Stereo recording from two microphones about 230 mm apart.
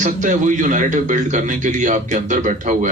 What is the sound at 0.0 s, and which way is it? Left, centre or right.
A man's voice, right.